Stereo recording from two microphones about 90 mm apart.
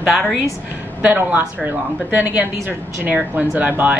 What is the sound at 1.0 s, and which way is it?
A woman's voice, 20° right (ahead or behind).